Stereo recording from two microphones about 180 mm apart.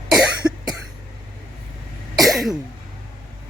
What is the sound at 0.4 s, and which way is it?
Cough, 5° right (ahead or behind).